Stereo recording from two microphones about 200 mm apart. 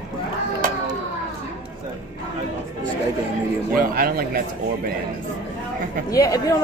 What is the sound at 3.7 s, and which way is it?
Speech, 45° right (ahead or behind).